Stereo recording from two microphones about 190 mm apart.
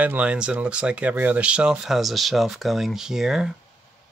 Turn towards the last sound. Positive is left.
turn(degrees=0)  # may be behind; listen again after turning